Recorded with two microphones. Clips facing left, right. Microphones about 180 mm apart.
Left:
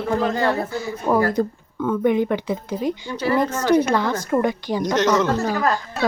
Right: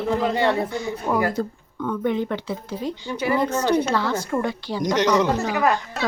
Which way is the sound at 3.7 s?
10° left (ahead or behind).